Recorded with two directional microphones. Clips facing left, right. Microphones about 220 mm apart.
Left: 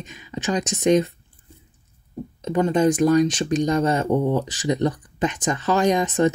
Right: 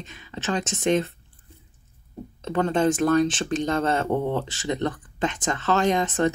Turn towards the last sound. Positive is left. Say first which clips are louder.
# left 3 dB
turn(degrees=15)  # may be behind; listen again after turning